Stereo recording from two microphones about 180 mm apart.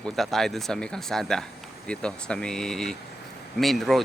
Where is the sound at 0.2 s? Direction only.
Centre (ahead or behind).